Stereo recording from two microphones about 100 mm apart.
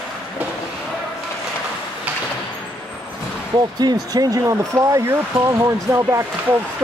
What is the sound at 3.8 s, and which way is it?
Speech, 40° right (ahead or behind).